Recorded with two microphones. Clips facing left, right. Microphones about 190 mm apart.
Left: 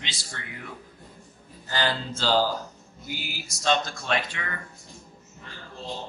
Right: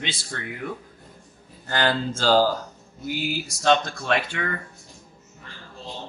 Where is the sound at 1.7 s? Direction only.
55° right (ahead or behind).